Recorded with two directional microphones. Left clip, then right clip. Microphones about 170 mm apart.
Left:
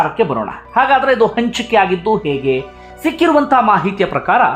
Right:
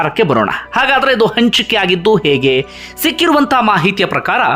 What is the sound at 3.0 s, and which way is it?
Speech, 25° right (ahead or behind).